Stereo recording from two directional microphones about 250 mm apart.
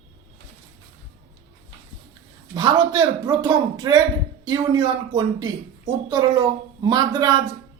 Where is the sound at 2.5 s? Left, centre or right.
Centre.